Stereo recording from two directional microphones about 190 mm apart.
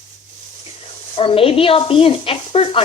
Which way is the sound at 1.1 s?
30° left (ahead or behind).